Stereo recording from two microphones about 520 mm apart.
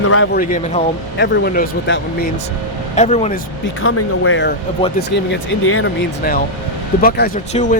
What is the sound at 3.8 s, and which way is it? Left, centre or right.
Speech, left.